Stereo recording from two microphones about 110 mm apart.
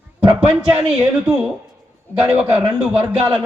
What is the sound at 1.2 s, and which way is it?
A man's voice, 10° right (ahead or behind).